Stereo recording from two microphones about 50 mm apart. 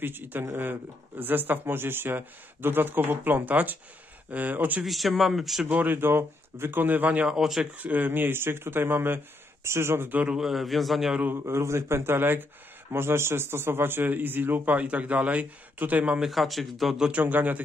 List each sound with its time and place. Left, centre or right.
0.0 s a man's voice: right
4.8 s speech: centre
5.7 s speech: right
7.2 s speech: centre
7.7 s speech: right
9.6 s a man's voice: right
10.4 s speech: centre
11.3 s a man's voice: right
12.9 s a man's voice: right
16.2 s speech: centre
17.1 s a man's voice: right